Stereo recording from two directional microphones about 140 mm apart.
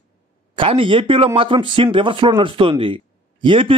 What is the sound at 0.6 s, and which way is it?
Speech, 40° right (ahead or behind).